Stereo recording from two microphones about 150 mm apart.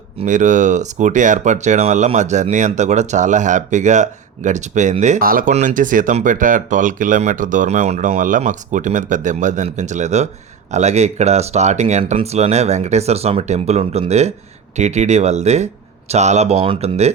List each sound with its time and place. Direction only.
0.3 s speech: 55° right (ahead or behind)
5.2 s speech: 70° right (ahead or behind); by 17.1 s 45° right (ahead or behind)